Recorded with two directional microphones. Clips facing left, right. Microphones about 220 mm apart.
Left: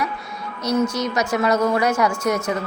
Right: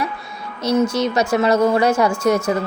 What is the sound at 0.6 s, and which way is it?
A woman's voice, 30° right (ahead or behind).